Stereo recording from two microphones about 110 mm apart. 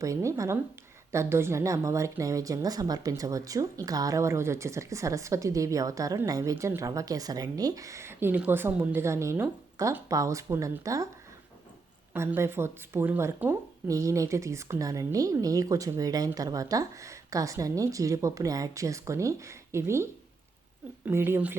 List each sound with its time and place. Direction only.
0.0 s speech: 25° right (ahead or behind)
12.1 s speech: 25° right (ahead or behind)